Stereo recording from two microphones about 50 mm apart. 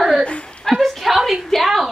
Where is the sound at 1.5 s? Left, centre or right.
Centre.